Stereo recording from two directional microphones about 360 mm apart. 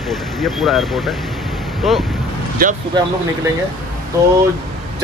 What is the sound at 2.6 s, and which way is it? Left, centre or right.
Speech, right.